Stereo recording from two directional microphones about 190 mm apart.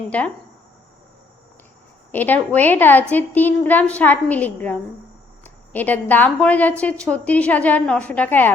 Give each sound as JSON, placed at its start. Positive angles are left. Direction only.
{"t": 2.1, "sound": "a woman's voice", "side_deg": 10}